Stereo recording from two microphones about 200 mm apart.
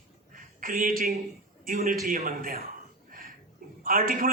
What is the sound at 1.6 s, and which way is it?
Speech, 45° right (ahead or behind).